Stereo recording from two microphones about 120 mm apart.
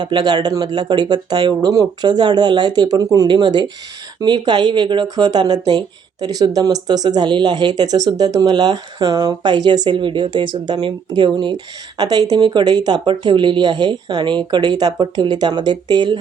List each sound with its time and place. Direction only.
0.0 s speech: 40° right (ahead or behind)